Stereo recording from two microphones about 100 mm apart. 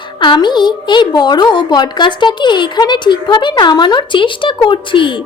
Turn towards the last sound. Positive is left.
turn(degrees=55)  # may be behind; listen again after turning